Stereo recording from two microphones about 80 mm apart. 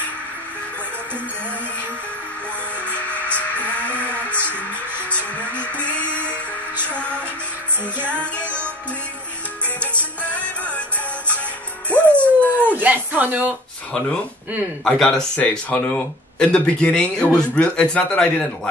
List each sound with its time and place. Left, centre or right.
2.9 s music: centre
5.1 s speech: centre
10.2 s music: centre
12.1 s dog: centre
12.5 s a sound: right
14.9 s speech: centre